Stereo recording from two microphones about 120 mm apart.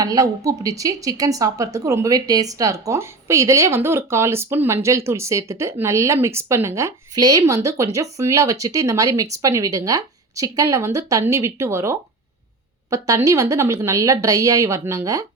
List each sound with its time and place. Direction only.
0.0 s speech: 30° right (ahead or behind)